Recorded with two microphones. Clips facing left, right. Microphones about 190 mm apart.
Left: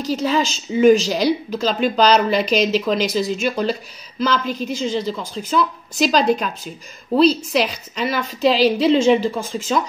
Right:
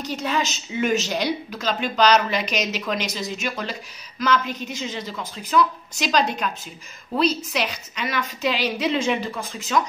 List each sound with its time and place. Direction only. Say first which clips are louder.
0.1 s a woman's voice: left 6 dB; 35° left (ahead or behind)